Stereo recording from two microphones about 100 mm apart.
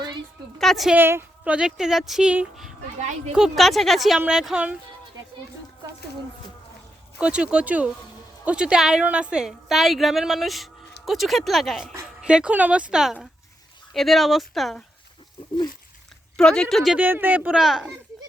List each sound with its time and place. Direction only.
0.6 s a woman's voice: centre (ahead or behind)
0.9 s a woman's voice: 20° right (ahead or behind)
1.5 s a woman's voice: 5° right (ahead or behind)
3.3 s a woman's voice: centre (ahead or behind)
7.2 s a woman's voice: 10° right (ahead or behind)
16.4 s a woman's voice: 5° left (ahead or behind)
17.0 s speech: 20° right (ahead or behind)
17.6 s a woman's voice: 5° right (ahead or behind)